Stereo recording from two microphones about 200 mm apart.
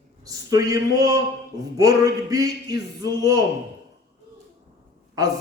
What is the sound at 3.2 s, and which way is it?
Speech, 20° right (ahead or behind).